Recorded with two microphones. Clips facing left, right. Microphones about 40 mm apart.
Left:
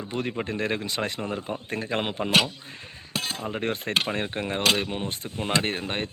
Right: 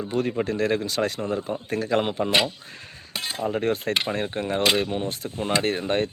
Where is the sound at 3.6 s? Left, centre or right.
Left.